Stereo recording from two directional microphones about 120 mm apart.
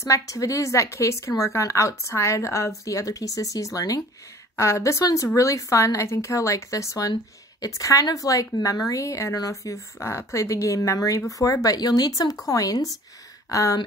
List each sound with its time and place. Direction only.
0.0 s a woman's voice: 30° left (ahead or behind)